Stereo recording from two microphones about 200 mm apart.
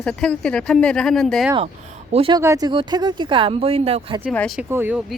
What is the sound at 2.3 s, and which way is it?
Speech, 15° right (ahead or behind).